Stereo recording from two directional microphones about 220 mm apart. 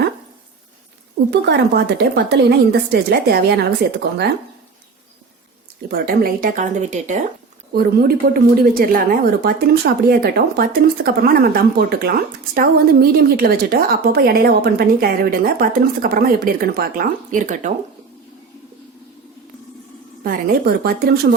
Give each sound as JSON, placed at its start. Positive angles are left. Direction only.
{"t": 1.3, "sound": "a woman's voice", "side_deg": -50}
{"t": 5.9, "sound": "speech", "side_deg": -40}
{"t": 7.7, "sound": "a woman's voice", "side_deg": -45}
{"t": 20.2, "sound": "speech", "side_deg": -40}